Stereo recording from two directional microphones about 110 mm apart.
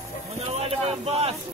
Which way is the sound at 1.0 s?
70° right (ahead or behind).